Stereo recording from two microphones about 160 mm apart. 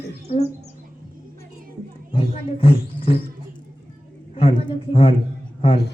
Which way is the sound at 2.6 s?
35° left (ahead or behind).